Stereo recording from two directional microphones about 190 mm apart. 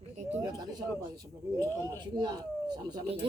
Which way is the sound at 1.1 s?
20° right (ahead or behind).